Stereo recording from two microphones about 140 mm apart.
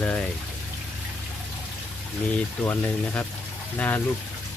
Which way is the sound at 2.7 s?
10° left (ahead or behind).